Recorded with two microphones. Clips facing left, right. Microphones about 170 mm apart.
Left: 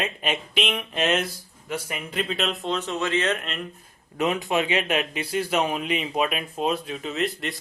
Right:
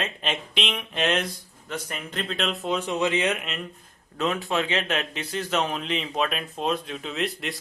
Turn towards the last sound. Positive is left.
turn(degrees=0)  # may be behind; listen again after turning